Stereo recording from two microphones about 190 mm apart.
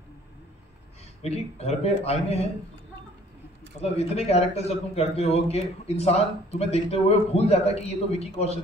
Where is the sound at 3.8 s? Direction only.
35° left (ahead or behind).